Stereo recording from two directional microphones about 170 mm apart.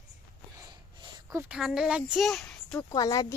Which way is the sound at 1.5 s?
5° right (ahead or behind).